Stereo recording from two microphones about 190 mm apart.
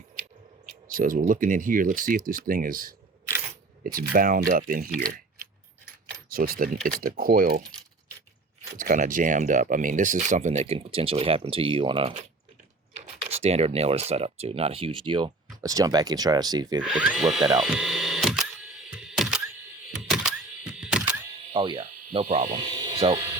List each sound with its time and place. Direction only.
0.6 s speech: 45° right (ahead or behind)
3.9 s speech: 50° right (ahead or behind)
6.3 s speech: 50° right (ahead or behind)
8.8 s speech: 45° right (ahead or behind); by 12.1 s 25° right (ahead or behind)
13.2 s speech: 35° right (ahead or behind)
16.8 s speech: 5° right (ahead or behind)
17.6 s a sound: centre (ahead or behind)
21.5 s insect: 25° right (ahead or behind)
22.1 s speech: 30° right (ahead or behind)
22.5 s speech: 25° right (ahead or behind)